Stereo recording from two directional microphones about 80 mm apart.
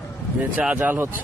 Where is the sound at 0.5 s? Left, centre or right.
Centre.